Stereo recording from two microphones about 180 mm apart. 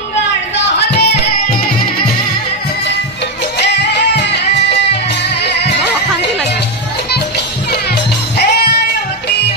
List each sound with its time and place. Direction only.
0.7 s music: 70° left (ahead or behind)
3.5 s music: 75° left (ahead or behind)